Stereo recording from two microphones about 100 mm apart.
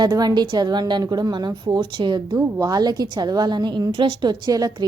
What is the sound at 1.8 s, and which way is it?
Speech, 55° right (ahead or behind).